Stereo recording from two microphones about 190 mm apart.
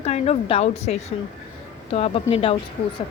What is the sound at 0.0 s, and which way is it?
A woman's voice, 30° left (ahead or behind).